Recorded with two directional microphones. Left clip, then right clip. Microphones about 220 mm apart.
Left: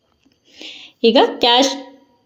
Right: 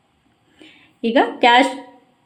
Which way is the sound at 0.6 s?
25° left (ahead or behind).